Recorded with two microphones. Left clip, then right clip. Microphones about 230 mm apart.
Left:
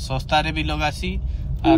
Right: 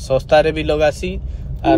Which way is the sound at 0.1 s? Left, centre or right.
Centre.